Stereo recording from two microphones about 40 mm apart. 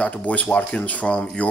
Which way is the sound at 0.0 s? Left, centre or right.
Left.